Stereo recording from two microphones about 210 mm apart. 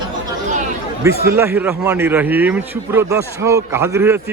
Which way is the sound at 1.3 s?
10° right (ahead or behind).